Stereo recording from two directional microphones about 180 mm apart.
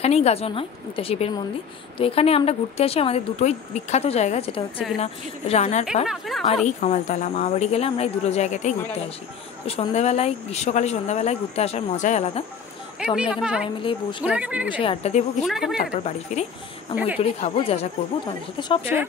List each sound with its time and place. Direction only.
0.0 s speech: 35° left (ahead or behind)
6.0 s a woman's voice: centre (ahead or behind)
6.4 s speech: 35° left (ahead or behind)
13.0 s a woman's voice: 5° right (ahead or behind)
14.7 s speech: 30° left (ahead or behind)
15.4 s a woman's voice: centre (ahead or behind)
15.9 s speech: 40° left (ahead or behind)